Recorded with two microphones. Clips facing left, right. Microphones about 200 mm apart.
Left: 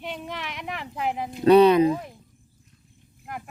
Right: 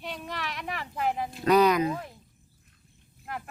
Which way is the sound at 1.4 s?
30° left (ahead or behind).